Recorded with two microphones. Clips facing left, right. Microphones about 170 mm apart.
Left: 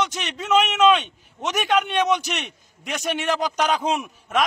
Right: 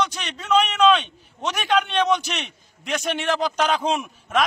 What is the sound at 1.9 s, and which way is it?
A man's voice, 15° left (ahead or behind).